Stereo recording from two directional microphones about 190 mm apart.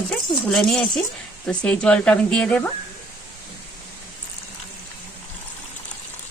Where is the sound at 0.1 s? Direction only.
5° left (ahead or behind).